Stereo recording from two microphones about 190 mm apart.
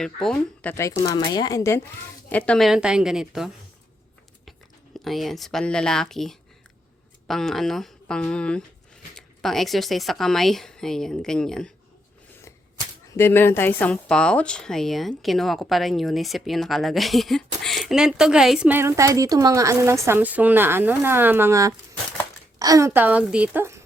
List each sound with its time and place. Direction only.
0.0 s speech: 5° left (ahead or behind)
2.3 s speech: 5° left (ahead or behind)
4.9 s speech: centre (ahead or behind)
13.1 s a woman's voice: 10° left (ahead or behind); by 23.8 s 10° right (ahead or behind)